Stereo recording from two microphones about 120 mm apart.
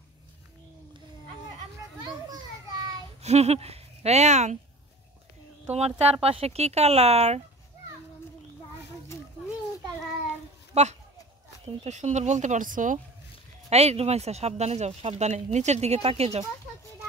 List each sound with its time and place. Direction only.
2.0 s children playing: 35° right (ahead or behind)
3.2 s speech: 65° right (ahead or behind)
5.7 s speech: 60° right (ahead or behind)
10.7 s speech: 70° right (ahead or behind); by 13.0 s 90° right
13.7 s speech: 60° right (ahead or behind)